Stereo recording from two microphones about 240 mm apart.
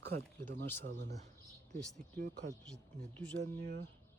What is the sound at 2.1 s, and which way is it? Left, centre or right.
Speech, right.